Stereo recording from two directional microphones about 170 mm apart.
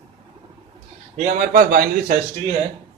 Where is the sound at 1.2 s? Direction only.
55° right (ahead or behind).